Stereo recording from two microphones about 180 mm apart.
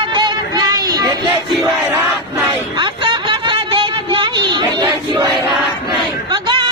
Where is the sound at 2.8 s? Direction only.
25° right (ahead or behind).